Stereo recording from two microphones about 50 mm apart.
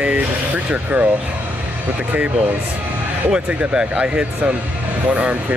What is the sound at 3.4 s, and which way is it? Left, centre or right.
Speech, right.